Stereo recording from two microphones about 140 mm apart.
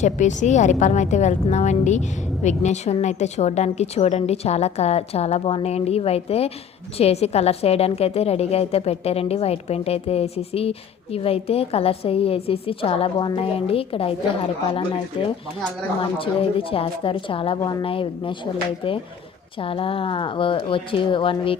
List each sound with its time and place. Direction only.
0.0 s a woman's voice: 60° left (ahead or behind); by 17.6 s 40° left (ahead or behind)
17.6 s a woman's voice: 30° left (ahead or behind)
17.8 s speech: 40° left (ahead or behind)